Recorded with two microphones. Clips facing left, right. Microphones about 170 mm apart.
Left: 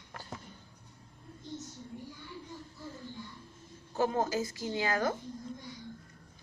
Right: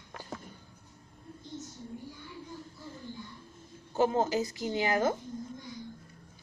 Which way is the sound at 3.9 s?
20° right (ahead or behind).